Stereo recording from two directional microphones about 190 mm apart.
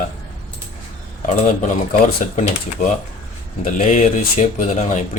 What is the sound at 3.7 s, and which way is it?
Speech, 40° left (ahead or behind).